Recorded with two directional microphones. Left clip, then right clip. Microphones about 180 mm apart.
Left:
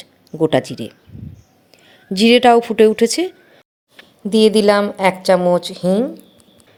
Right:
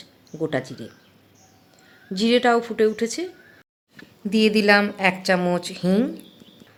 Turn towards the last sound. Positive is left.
turn(degrees=-5)  # may be behind; listen again after turning